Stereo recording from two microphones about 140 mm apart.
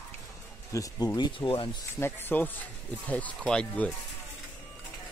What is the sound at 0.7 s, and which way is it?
Speech, 25° left (ahead or behind).